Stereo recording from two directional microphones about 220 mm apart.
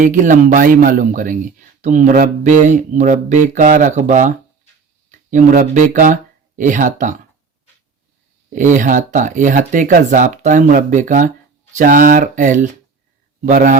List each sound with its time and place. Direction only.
0.0 s a man's voice: 35° right (ahead or behind)
8.5 s a man's voice: 35° right (ahead or behind)